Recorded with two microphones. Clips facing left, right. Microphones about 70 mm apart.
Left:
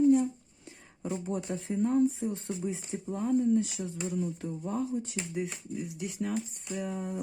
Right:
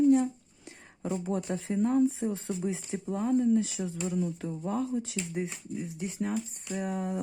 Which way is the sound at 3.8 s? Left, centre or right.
Right.